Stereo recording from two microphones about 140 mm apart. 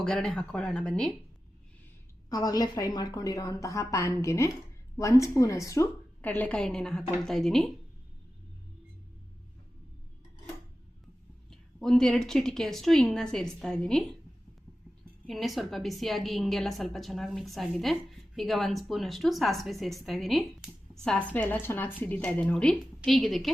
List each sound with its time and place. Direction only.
0.0 s a woman's voice: 5° left (ahead or behind)
2.3 s a woman's voice: 25° left (ahead or behind)
6.2 s a woman's voice: 10° left (ahead or behind)
11.5 s a woman's voice: 5° left (ahead or behind)
15.3 s a woman's voice: centre (ahead or behind)